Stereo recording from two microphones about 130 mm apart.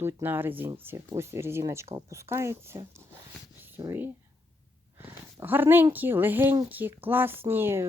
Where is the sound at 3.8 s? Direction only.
20° right (ahead or behind).